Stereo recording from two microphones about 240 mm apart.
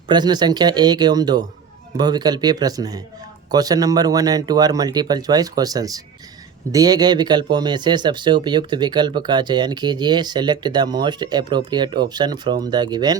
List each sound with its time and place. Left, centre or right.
0.1 s speech: centre